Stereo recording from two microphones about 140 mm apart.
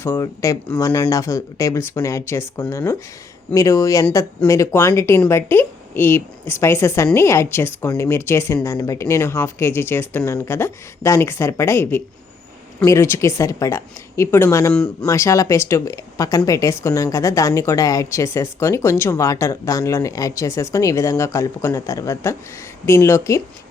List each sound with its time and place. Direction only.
0.0 s speech: 20° left (ahead or behind)